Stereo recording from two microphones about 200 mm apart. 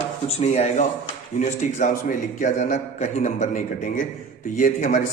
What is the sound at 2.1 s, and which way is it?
A man's voice, 40° left (ahead or behind).